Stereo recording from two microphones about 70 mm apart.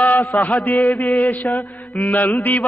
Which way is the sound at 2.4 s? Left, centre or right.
Left.